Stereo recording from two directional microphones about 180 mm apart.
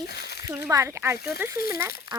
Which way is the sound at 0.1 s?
65° left (ahead or behind).